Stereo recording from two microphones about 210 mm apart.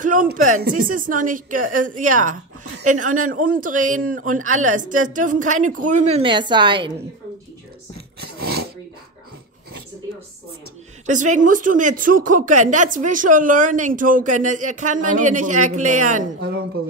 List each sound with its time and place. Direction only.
0.0 s a woman's voice: 40° right (ahead or behind); by 6.9 s 20° right (ahead or behind)
8.4 s a sound: 50° right (ahead or behind)
11.1 s speech: 35° right (ahead or behind)
16.3 s speech: 50° right (ahead or behind)